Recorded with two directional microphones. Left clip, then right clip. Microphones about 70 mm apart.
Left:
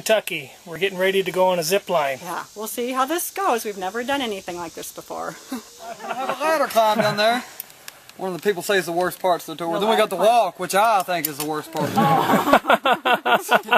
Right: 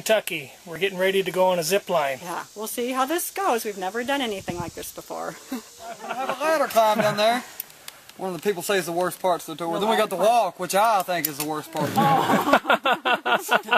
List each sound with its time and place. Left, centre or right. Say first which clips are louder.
0.0 s speech: left 2 dB; centre
5.9 s speech: left 2 dB; centre
12.1 s a sound: left 3 dB; left